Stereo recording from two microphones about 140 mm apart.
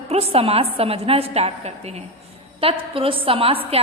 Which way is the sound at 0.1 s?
45° right (ahead or behind).